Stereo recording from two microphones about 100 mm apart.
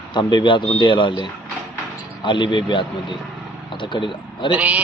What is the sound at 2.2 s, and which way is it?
A man's voice, 55° left (ahead or behind).